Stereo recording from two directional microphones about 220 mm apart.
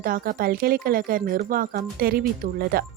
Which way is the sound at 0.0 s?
40° right (ahead or behind).